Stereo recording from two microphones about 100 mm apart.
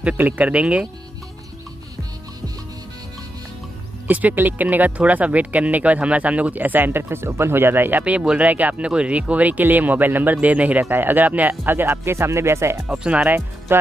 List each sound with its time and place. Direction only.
0.0 s speech: 15° right (ahead or behind)
4.1 s speech: 15° right (ahead or behind)
12.8 s speech: 10° right (ahead or behind)
13.7 s music: 25° right (ahead or behind)